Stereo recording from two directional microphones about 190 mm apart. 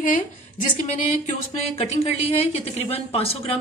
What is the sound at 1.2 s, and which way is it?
A woman's voice, 35° left (ahead or behind).